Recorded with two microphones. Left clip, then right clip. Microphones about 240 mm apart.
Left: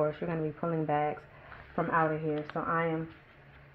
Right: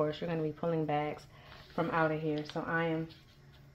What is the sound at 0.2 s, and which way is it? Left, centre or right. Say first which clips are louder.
Speech: left 1 dB; left.